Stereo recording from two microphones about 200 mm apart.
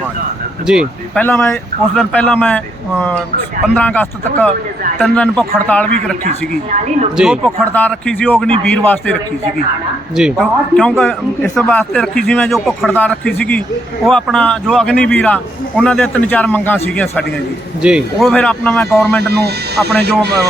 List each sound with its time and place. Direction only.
0.7 s a man's voice: 5° right (ahead or behind)
1.2 s a man's voice: 10° left (ahead or behind)
6.2 s speech: 35° right (ahead or behind)
7.2 s a man's voice: 5° right (ahead or behind)
7.7 s a man's voice: 10° left (ahead or behind)
10.2 s a man's voice: centre (ahead or behind)
17.8 s a man's voice: centre (ahead or behind)